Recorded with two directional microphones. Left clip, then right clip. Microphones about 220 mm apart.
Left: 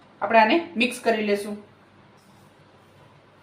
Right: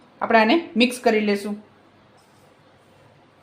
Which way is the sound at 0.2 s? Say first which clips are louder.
Right 1 dB; 50° right (ahead or behind).